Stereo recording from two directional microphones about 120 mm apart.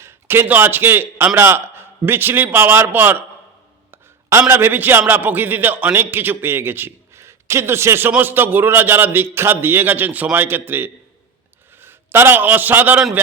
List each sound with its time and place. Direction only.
0.0 s a man's voice: 20° right (ahead or behind)